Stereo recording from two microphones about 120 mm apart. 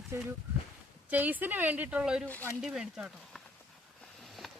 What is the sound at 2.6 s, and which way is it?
Speech, 5° right (ahead or behind).